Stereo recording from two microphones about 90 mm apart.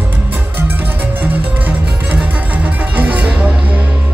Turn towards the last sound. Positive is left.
turn(degrees=-15)  # may be behind; listen again after turning